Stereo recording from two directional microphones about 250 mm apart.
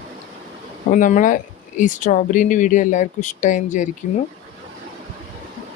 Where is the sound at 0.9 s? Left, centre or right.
Left.